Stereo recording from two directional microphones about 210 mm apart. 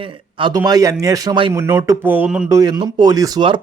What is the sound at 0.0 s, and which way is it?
Speech, 25° right (ahead or behind).